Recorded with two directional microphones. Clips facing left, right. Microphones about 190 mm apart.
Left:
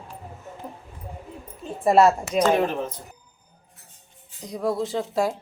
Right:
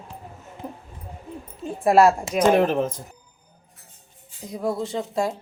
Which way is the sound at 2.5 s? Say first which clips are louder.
Right 4 dB; 45° right (ahead or behind).